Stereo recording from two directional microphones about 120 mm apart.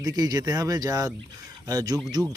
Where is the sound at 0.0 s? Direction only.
30° right (ahead or behind).